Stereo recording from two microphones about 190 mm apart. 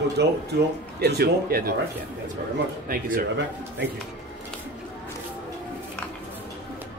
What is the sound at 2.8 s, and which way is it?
Speech, 45° right (ahead or behind).